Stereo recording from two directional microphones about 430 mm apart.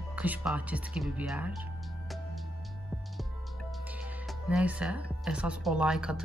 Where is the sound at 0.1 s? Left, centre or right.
Centre.